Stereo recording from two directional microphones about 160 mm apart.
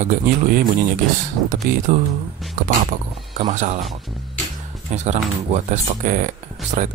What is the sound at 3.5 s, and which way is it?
Speech, 50° right (ahead or behind).